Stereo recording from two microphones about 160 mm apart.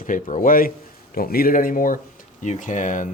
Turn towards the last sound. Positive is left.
turn(degrees=50)  # may be behind; listen again after turning